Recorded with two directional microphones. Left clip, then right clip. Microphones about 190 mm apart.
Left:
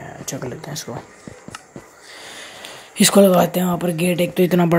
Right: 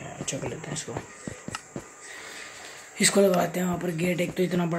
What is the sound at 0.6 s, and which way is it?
Speech, 20° left (ahead or behind).